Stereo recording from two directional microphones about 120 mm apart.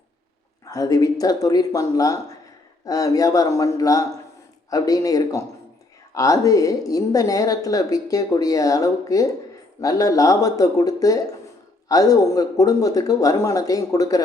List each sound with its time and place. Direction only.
0.6 s a woman's voice: 30° left (ahead or behind)